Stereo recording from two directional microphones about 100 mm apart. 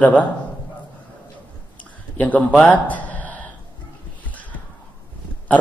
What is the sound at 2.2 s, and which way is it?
A man's voice, 15° left (ahead or behind).